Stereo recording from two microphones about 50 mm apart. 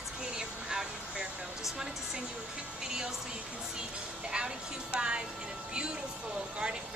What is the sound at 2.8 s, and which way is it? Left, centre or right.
Music, centre.